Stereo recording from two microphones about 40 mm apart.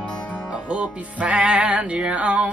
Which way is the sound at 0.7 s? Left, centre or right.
Right.